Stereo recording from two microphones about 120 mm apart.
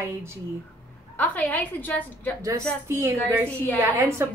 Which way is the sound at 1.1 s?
15° left (ahead or behind).